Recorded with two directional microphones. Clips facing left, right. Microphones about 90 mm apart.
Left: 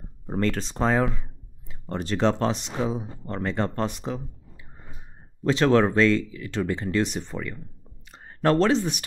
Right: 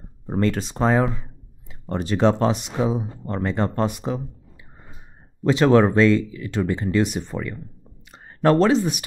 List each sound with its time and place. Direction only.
0.3 s speech: 10° right (ahead or behind)